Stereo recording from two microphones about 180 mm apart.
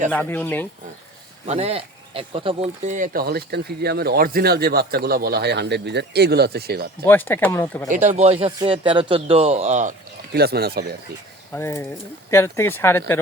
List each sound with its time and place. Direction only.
0.1 s speech: 10° left (ahead or behind)
1.5 s speech: 35° right (ahead or behind); by 6.8 s 60° right (ahead or behind)
7.0 s speech: 10° left (ahead or behind)
7.9 s speech: 45° right (ahead or behind)
10.3 s speech: 60° right (ahead or behind)
11.5 s speech: 15° left (ahead or behind)